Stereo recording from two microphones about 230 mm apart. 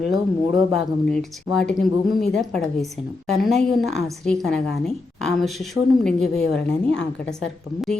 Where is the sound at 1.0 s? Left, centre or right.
Centre.